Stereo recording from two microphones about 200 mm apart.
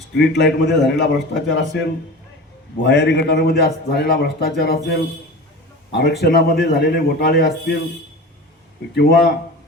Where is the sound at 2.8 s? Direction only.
60° left (ahead or behind).